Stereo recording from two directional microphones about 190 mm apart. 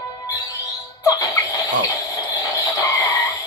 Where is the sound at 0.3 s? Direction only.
15° left (ahead or behind).